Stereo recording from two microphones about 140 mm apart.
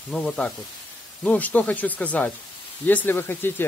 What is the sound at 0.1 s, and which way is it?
Speech, 5° left (ahead or behind).